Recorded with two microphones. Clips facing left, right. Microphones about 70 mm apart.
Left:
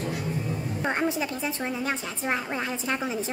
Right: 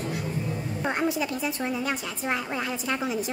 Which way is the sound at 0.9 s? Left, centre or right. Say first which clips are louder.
Right 1 dB; left.